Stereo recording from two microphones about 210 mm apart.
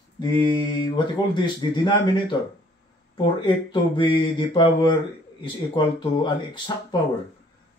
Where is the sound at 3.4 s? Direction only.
25° left (ahead or behind).